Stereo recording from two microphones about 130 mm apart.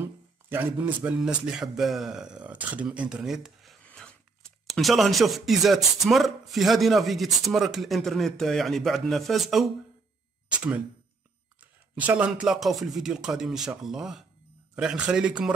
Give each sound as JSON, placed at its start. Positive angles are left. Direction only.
{"t": 0.0, "sound": "speech", "side_deg": -15}
{"t": 12.0, "sound": "speech", "side_deg": -10}